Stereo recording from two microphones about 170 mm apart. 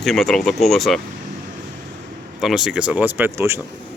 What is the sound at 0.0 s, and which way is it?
Speech, centre (ahead or behind).